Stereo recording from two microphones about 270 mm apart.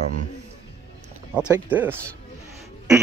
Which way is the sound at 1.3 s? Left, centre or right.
Centre.